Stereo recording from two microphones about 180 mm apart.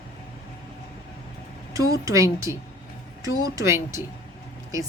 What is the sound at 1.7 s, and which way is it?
Speech, 20° right (ahead or behind).